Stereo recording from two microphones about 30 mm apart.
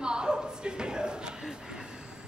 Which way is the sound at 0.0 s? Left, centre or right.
Right.